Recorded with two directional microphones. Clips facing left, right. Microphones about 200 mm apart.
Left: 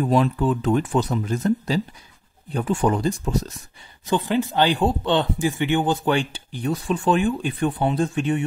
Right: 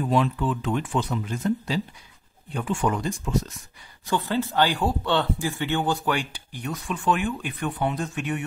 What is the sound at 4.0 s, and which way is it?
Speech, 20° left (ahead or behind).